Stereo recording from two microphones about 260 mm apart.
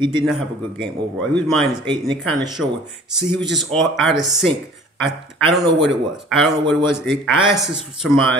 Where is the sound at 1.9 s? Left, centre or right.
Centre.